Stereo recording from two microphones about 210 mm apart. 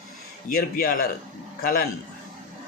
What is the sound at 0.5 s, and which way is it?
Speech, 45° left (ahead or behind).